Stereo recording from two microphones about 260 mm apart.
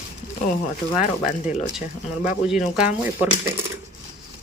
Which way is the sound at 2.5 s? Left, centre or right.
Centre.